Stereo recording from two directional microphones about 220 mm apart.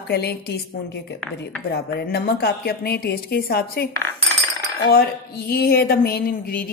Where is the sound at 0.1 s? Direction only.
45° left (ahead or behind).